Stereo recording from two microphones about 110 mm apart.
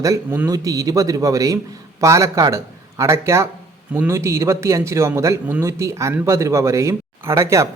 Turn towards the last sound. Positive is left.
turn(degrees=-25)  # may be behind; listen again after turning